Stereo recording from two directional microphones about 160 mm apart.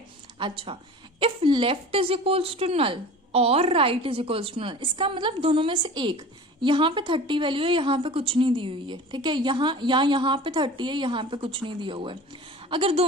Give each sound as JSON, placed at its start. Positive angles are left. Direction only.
{"t": 0.3, "sound": "a woman's voice", "side_deg": -30}